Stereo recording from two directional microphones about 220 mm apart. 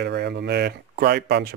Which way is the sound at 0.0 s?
50° right (ahead or behind).